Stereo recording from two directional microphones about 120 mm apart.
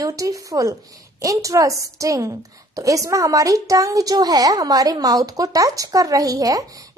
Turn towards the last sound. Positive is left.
turn(degrees=-30)  # may be behind; listen again after turning